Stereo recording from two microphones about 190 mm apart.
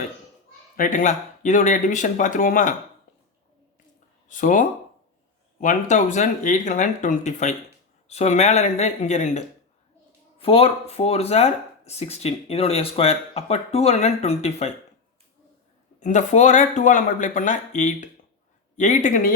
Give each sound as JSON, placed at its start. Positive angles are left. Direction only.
{"t": 0.8, "sound": "speech", "side_deg": 45}
{"t": 4.3, "sound": "speech", "side_deg": 45}
{"t": 16.0, "sound": "speech", "side_deg": 40}